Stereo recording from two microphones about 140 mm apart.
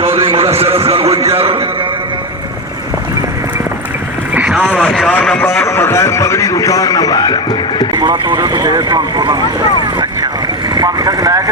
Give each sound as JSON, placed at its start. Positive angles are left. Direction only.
{"t": 0.3, "sound": "a man's voice", "side_deg": -45}
{"t": 4.4, "sound": "boat", "side_deg": -10}
{"t": 4.8, "sound": "a sound", "side_deg": 0}
{"t": 5.6, "sound": "a man's voice", "side_deg": 20}
{"t": 7.9, "sound": "speech", "side_deg": -35}
{"t": 10.8, "sound": "vehicle", "side_deg": -25}